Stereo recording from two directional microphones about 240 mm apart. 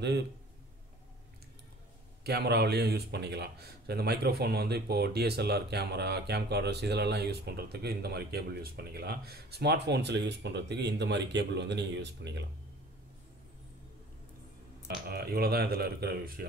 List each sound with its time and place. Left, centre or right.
2.2 s a man's voice: right
15.0 s speech: right